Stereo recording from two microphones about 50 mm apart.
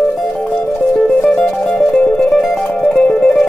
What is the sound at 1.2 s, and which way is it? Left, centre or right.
Music, centre.